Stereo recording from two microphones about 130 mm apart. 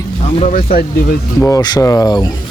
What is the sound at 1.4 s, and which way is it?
Speech, 30° left (ahead or behind).